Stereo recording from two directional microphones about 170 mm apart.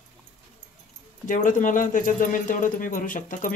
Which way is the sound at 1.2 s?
50° left (ahead or behind).